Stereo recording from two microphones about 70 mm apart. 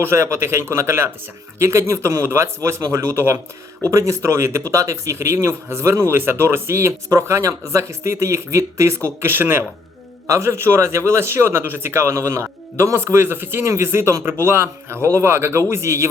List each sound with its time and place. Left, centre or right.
0.0 s speech: right
3.9 s speech: right
9.2 s speech: right